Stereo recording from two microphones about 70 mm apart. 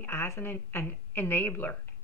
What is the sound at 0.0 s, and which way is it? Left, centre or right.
A woman's voice, left.